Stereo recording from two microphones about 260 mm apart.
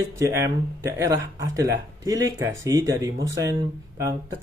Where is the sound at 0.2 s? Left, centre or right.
Centre.